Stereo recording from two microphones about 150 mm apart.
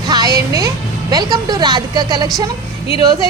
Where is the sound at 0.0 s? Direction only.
25° right (ahead or behind).